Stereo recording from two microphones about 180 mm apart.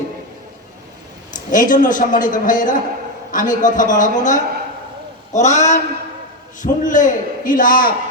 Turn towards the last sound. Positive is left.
turn(degrees=50)  # may be behind; listen again after turning